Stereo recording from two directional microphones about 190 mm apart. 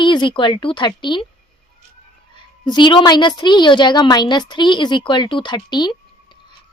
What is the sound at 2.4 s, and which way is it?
A woman's voice, 25° left (ahead or behind).